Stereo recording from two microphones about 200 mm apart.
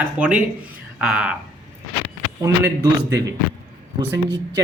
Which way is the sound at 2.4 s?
15° right (ahead or behind).